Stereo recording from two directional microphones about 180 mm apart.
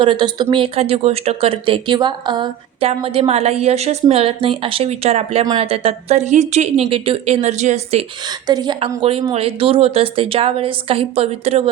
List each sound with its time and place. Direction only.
0.0 s speech: 25° right (ahead or behind)
8.4 s a woman's voice: 25° right (ahead or behind)